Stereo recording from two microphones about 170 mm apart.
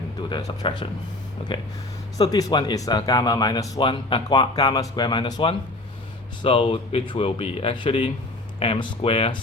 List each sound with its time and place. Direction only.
0.3 s speech: 25° left (ahead or behind)
2.1 s speech: 20° left (ahead or behind)